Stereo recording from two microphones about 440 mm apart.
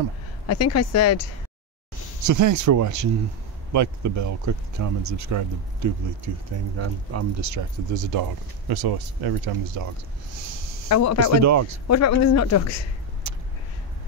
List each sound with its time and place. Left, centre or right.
0.5 s speech: left
2.2 s speech: right
10.9 s speech: left
11.4 s speech: right
11.9 s speech: left
13.2 s vehicle: right